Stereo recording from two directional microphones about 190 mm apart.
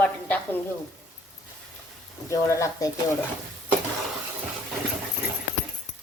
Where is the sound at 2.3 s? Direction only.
15° left (ahead or behind).